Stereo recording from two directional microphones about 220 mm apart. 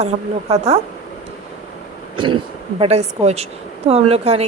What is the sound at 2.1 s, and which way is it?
A woman's voice, 20° right (ahead or behind).